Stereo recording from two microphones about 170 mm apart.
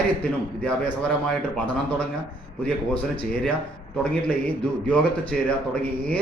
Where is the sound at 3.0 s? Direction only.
5° left (ahead or behind).